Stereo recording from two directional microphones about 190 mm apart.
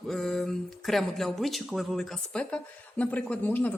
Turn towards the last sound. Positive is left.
turn(degrees=10)  # may be behind; listen again after turning